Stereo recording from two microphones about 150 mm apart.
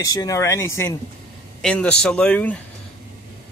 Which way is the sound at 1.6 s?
5° left (ahead or behind).